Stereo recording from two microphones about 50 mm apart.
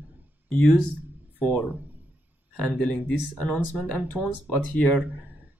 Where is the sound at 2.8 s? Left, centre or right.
Left.